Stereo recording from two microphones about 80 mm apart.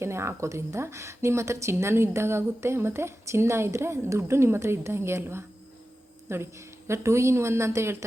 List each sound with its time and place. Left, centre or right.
0.0 s a woman's voice: right